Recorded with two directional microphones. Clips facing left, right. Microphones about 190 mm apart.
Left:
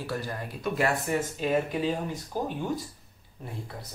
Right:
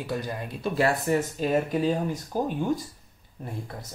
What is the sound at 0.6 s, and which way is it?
Speech, 35° right (ahead or behind).